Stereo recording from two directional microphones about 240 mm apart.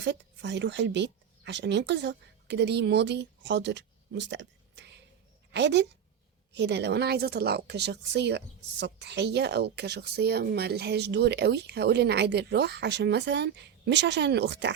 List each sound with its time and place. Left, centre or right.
0.0 s a woman's voice: right